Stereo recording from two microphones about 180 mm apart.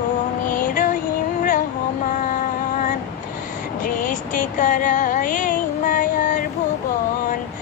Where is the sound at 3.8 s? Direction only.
45° left (ahead or behind).